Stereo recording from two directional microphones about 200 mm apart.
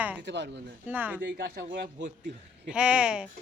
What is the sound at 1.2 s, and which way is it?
Speech, 55° right (ahead or behind).